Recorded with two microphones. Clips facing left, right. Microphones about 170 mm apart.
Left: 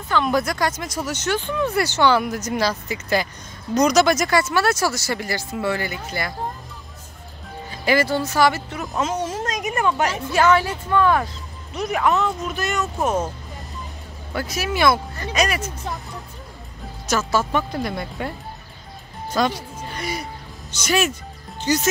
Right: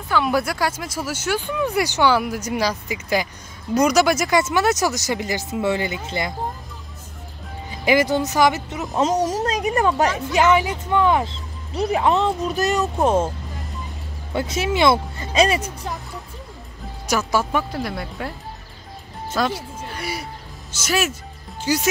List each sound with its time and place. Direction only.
0.1 s speech: 10° right (ahead or behind)
4.4 s speech: 20° right (ahead or behind)
7.8 s speech: 15° right (ahead or behind)
8.9 s speech: 40° right (ahead or behind)
10.3 s speech: 15° right (ahead or behind)
11.7 s speech: 30° right (ahead or behind)
14.3 s speech: 25° right (ahead or behind)
17.1 s speech: 15° right (ahead or behind)
19.3 s music: 5° right (ahead or behind)
20.7 s speech: 5° right (ahead or behind)
21.5 s music: 10° right (ahead or behind)